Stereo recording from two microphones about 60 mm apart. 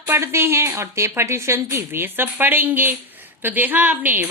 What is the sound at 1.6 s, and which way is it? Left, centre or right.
A woman's voice, right.